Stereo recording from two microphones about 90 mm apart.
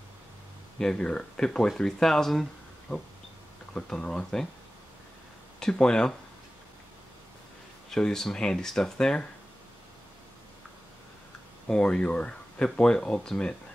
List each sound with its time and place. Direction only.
0.7 s speech: 5° left (ahead or behind)
2.9 s a sound: 25° left (ahead or behind)
3.7 s speech: 10° left (ahead or behind)
5.6 s speech: 10° left (ahead or behind)
7.9 s speech: 5° left (ahead or behind)
11.6 s speech: 10° left (ahead or behind)